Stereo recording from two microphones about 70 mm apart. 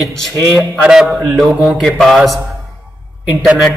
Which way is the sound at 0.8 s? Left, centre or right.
Centre.